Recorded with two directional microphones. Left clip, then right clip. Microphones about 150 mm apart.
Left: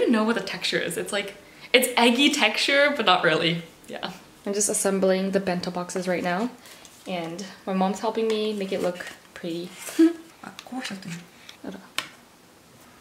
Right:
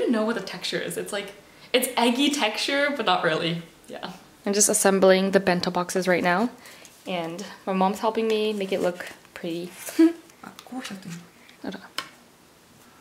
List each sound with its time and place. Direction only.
0.0 s speech: centre (ahead or behind)
4.5 s a woman's voice: 30° right (ahead or behind)
9.9 s speech: centre (ahead or behind)
12.0 s a sound: centre (ahead or behind)